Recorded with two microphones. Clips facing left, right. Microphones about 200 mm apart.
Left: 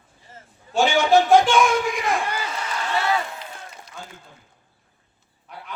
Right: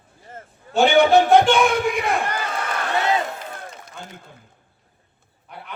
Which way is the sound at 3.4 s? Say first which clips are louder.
Right 4 dB; 50° right (ahead or behind).